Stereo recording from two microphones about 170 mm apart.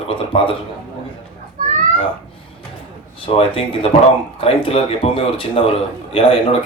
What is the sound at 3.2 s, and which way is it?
A man's voice, 30° left (ahead or behind).